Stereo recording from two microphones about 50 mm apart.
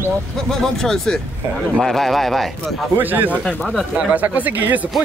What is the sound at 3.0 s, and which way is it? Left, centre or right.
Speech, right.